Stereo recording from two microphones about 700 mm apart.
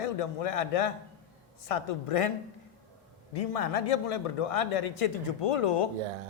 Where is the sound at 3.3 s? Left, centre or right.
Left.